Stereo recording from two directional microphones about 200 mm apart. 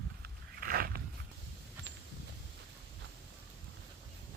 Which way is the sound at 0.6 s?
50° right (ahead or behind).